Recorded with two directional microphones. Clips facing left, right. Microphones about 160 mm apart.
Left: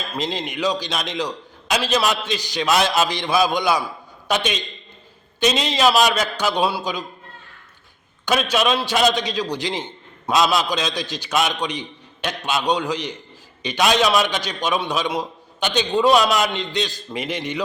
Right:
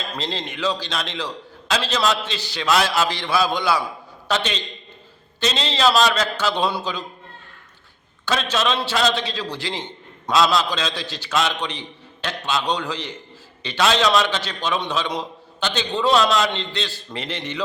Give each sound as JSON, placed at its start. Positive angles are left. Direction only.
{"t": 0.1, "sound": "a man's voice", "side_deg": 15}
{"t": 8.2, "sound": "a man's voice", "side_deg": 15}